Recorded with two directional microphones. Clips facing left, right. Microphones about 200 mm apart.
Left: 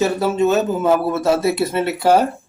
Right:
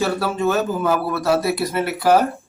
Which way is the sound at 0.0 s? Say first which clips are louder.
Left 4 dB; 20° left (ahead or behind).